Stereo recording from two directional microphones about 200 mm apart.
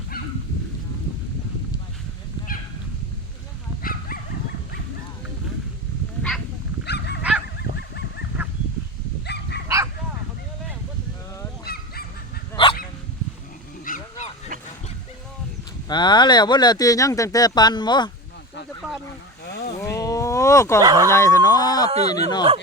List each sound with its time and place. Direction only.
3.8 s dog: 45° left (ahead or behind)
6.8 s dog: 55° left (ahead or behind)
9.2 s dog: 55° left (ahead or behind)
9.6 s bow-wow: 15° right (ahead or behind)
11.6 s dog: 50° left (ahead or behind)
12.6 s dog: 25° left (ahead or behind)
13.8 s vehicle: 40° left (ahead or behind)
15.9 s speech: 20° left (ahead or behind)
19.5 s a sound: 55° left (ahead or behind)
19.8 s a sound: 15° left (ahead or behind)
20.8 s speech: 15° right (ahead or behind)
21.1 s speech: 15° left (ahead or behind)
21.8 s speech: 30° right (ahead or behind)
22.1 s speech: 20° left (ahead or behind)